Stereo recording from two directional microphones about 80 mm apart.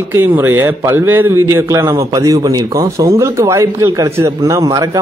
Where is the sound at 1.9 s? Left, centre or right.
Right.